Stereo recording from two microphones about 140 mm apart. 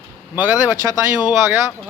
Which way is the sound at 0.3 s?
10° right (ahead or behind).